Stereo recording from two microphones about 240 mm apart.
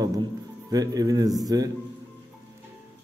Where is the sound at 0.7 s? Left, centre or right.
Centre.